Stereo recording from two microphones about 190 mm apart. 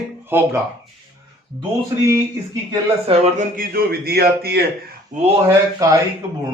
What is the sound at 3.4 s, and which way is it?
A man's voice, 50° right (ahead or behind).